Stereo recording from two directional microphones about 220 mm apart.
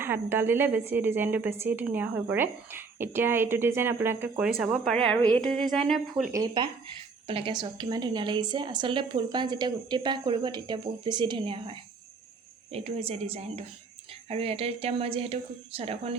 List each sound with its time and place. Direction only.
0.0 s speech: 10° right (ahead or behind)
6.3 s a woman's voice: 20° right (ahead or behind)